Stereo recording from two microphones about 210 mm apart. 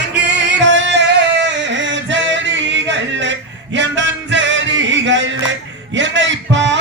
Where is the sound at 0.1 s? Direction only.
55° right (ahead or behind).